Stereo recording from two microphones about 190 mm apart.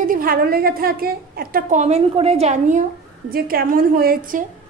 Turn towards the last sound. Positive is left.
turn(degrees=-50)  # may be behind; listen again after turning